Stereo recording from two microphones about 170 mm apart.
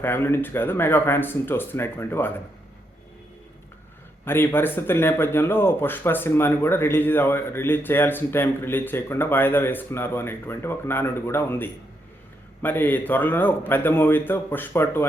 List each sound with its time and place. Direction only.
0.0 s speech: 15° left (ahead or behind)
4.3 s speech: 15° left (ahead or behind)